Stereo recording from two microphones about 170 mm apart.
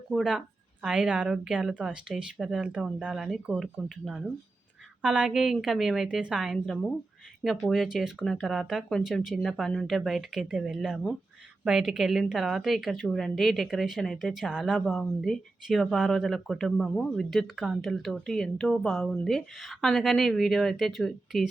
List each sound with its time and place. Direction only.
0.1 s speech: 5° right (ahead or behind)